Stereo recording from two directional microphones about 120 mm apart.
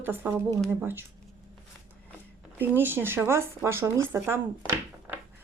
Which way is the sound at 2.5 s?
15° right (ahead or behind).